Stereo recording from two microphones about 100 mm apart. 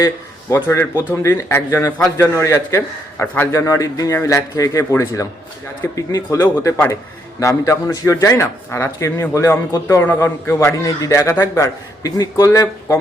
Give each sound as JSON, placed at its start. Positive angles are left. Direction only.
{"t": 0.5, "sound": "a man's voice", "side_deg": 30}